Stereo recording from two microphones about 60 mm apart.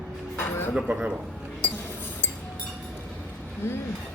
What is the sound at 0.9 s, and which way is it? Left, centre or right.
Speech, right.